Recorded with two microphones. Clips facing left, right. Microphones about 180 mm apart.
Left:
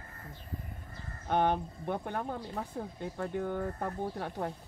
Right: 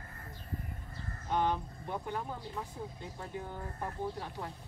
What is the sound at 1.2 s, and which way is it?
Speech, 60° left (ahead or behind).